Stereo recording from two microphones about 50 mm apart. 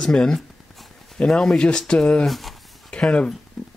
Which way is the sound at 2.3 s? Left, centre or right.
Centre.